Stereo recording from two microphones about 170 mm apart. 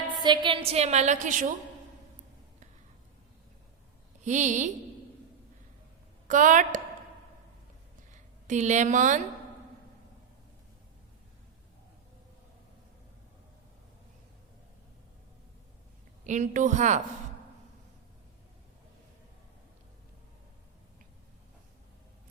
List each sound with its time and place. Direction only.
0.2 s a woman's voice: 25° right (ahead or behind); by 1.5 s 50° right (ahead or behind)
4.2 s a woman's voice: 45° right (ahead or behind)
6.2 s a woman's voice: 50° right (ahead or behind)
8.1 s a woman's voice: 45° right (ahead or behind)
16.2 s a woman's voice: 45° right (ahead or behind)